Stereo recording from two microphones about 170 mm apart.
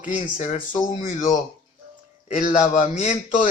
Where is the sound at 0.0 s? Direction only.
50° left (ahead or behind).